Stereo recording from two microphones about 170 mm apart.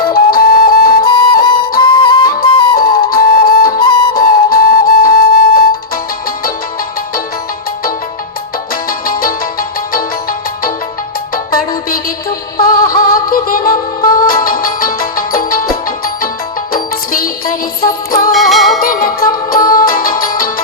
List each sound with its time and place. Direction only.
0.1 s music: 60° left (ahead or behind)
1.0 s music: 25° left (ahead or behind)
2.7 s music: 60° left (ahead or behind)
3.7 s music: 25° left (ahead or behind)
4.1 s flute: 60° left (ahead or behind)
8.7 s music: 60° left (ahead or behind)
12.5 s synthetic singing: 60° left (ahead or behind)
13.1 s music: 60° left (ahead or behind)
17.1 s music: 60° left (ahead or behind)
18.3 s music: centre (ahead or behind)
18.8 s music: 60° left (ahead or behind)